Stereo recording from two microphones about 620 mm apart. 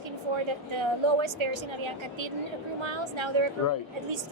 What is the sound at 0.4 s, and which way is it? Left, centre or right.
A woman's voice, right.